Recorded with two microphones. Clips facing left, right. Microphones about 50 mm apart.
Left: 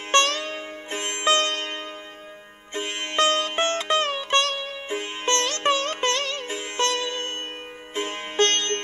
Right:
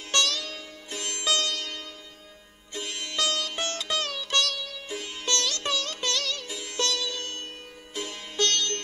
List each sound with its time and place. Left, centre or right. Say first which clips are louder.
0.1 s music: left 7 dB; left